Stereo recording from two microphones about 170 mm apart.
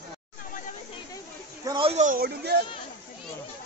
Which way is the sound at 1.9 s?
55° right (ahead or behind).